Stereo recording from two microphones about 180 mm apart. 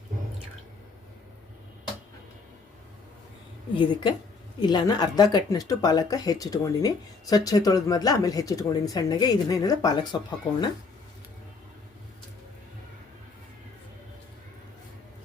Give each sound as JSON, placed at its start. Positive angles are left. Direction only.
{"t": 4.6, "sound": "speech", "side_deg": 25}